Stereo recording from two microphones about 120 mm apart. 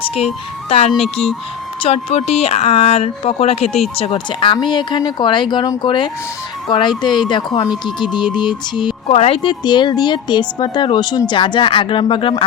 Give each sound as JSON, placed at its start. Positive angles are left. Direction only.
{"t": 0.0, "sound": "ice cream truck", "side_deg": 55}
{"t": 0.7, "sound": "speech", "side_deg": 55}
{"t": 9.0, "sound": "speech", "side_deg": 60}